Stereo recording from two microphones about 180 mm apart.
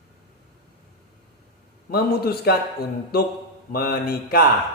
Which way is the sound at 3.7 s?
55° left (ahead or behind).